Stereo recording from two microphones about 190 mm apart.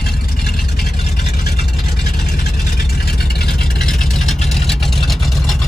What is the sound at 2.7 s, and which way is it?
Vehicle, 55° left (ahead or behind).